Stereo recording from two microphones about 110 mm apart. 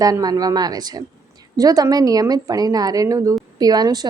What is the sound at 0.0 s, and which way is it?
A woman's voice, 35° right (ahead or behind).